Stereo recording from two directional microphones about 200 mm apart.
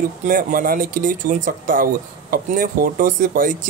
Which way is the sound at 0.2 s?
40° right (ahead or behind).